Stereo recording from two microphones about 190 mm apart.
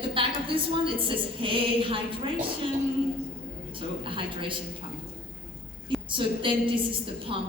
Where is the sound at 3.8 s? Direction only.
25° right (ahead or behind).